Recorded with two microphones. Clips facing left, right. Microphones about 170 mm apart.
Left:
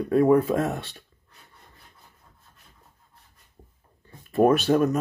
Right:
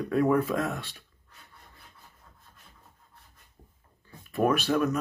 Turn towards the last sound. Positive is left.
turn(degrees=35)  # may be behind; listen again after turning